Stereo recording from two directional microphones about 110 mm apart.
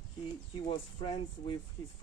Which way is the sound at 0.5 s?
45° left (ahead or behind).